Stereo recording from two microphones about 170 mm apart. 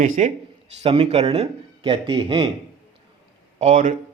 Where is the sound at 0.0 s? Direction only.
45° right (ahead or behind).